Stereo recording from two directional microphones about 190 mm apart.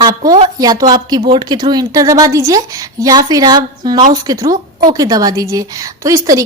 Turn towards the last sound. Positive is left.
turn(degrees=-15)  # may be behind; listen again after turning